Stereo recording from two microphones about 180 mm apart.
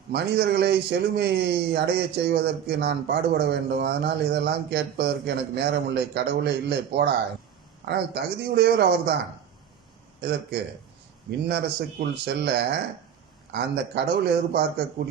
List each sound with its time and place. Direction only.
0.1 s a man's voice: 65° right (ahead or behind)
10.2 s a man's voice: 65° right (ahead or behind)